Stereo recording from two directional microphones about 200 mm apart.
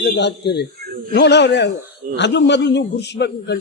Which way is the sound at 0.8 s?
45° right (ahead or behind).